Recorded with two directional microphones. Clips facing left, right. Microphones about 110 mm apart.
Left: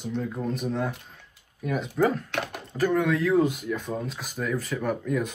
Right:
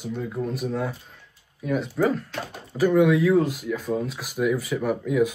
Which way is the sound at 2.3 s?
70° left (ahead or behind).